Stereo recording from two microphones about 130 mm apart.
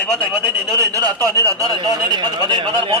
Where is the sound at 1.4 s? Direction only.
25° right (ahead or behind).